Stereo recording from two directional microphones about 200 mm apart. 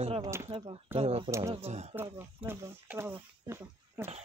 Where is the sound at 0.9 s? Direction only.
30° right (ahead or behind).